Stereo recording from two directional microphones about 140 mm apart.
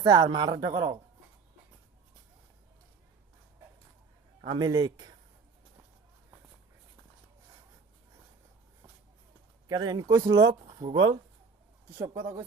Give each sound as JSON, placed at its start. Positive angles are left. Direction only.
{"t": 0.0, "sound": "speech", "side_deg": -30}
{"t": 4.4, "sound": "speech", "side_deg": -30}
{"t": 9.6, "sound": "speech", "side_deg": -30}
{"t": 10.3, "sound": "speech", "side_deg": -40}
{"t": 11.9, "sound": "speech", "side_deg": -20}